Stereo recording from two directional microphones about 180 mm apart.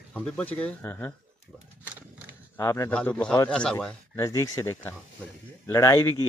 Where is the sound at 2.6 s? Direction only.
15° left (ahead or behind).